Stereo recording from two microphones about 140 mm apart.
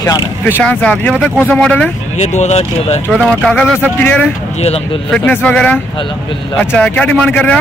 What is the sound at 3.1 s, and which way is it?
Speech, centre (ahead or behind).